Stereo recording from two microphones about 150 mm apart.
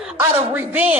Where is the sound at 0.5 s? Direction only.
10° right (ahead or behind).